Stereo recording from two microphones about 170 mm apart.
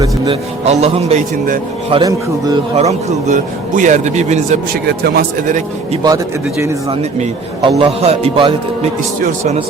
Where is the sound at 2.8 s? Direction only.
45° right (ahead or behind).